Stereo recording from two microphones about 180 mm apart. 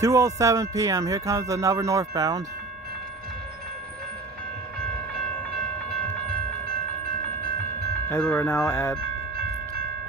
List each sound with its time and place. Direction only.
0.0 s music: 15° right (ahead or behind)
8.1 s speech: 10° left (ahead or behind)